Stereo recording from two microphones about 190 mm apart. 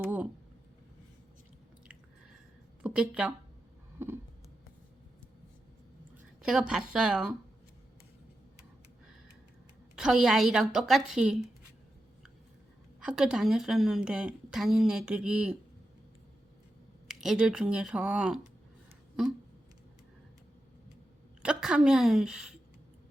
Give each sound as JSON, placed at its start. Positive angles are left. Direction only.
{"t": 2.8, "sound": "speech", "side_deg": -5}
{"t": 6.4, "sound": "a woman's voice", "side_deg": -5}
{"t": 9.9, "sound": "a woman's voice", "side_deg": -5}
{"t": 13.0, "sound": "a woman's voice", "side_deg": -5}
{"t": 17.1, "sound": "a woman's voice", "side_deg": -5}
{"t": 21.4, "sound": "a woman's voice", "side_deg": -5}